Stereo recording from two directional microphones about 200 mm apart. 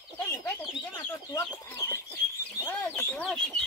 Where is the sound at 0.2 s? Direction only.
10° left (ahead or behind).